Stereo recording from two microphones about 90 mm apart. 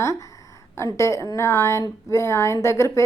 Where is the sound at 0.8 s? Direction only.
30° left (ahead or behind).